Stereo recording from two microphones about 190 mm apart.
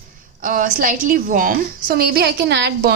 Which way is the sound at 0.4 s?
45° right (ahead or behind).